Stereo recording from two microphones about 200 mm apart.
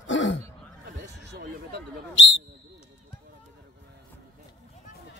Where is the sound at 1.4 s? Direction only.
55° right (ahead or behind).